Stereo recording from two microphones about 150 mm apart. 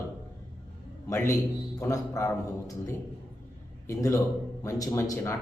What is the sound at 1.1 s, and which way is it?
A man's voice, 20° left (ahead or behind).